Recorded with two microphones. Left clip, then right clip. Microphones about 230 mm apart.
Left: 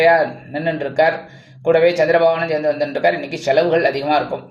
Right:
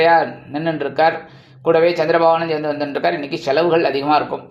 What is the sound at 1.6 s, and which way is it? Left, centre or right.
Speech, right.